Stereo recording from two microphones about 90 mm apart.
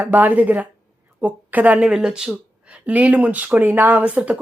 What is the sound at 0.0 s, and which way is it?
A woman's voice, 20° right (ahead or behind).